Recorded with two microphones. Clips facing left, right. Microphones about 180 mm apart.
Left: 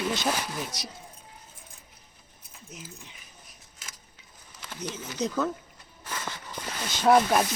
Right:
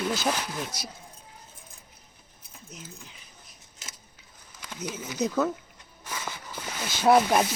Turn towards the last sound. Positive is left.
turn(degrees=-5)  # may be behind; listen again after turning